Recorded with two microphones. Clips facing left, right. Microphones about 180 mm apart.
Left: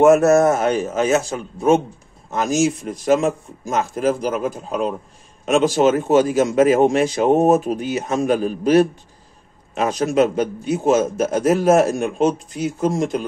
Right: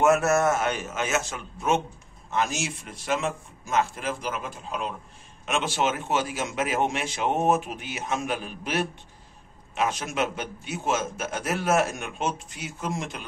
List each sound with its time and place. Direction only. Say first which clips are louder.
0.0 s a man's voice: left 9 dB; 40° left (ahead or behind)